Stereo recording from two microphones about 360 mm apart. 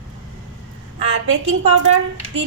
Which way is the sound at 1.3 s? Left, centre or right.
Right.